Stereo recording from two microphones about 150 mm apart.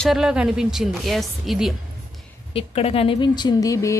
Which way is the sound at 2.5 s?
40° left (ahead or behind).